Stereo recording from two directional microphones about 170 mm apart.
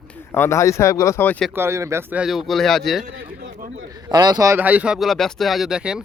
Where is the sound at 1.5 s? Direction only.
15° right (ahead or behind); by 3.0 s centre (ahead or behind).